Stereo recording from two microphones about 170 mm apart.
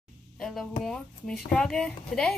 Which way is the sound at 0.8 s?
5° left (ahead or behind).